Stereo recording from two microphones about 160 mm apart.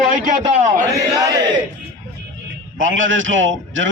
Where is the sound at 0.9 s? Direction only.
25° right (ahead or behind).